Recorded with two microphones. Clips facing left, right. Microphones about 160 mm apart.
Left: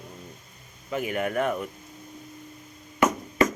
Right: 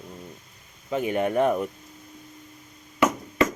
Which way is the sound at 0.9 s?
30° right (ahead or behind).